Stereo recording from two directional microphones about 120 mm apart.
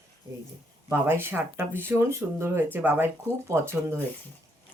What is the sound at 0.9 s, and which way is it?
Speech, 20° right (ahead or behind).